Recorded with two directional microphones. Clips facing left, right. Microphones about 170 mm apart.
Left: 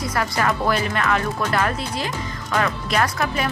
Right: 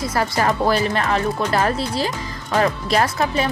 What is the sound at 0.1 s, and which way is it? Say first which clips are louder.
Speech: right 2 dB; 30° right (ahead or behind).